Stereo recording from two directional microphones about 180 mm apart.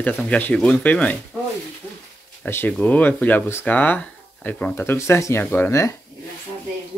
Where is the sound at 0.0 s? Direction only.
5° left (ahead or behind).